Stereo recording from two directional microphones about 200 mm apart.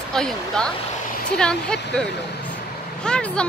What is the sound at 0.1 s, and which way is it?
Speech, 5° left (ahead or behind).